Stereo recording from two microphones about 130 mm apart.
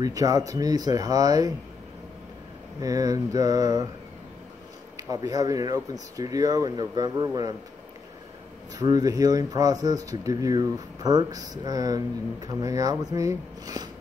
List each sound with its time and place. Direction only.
0.0 s speech: 25° right (ahead or behind)
2.8 s speech: 25° right (ahead or behind)
4.9 s speech: 25° right (ahead or behind)
8.7 s speech: 30° right (ahead or behind)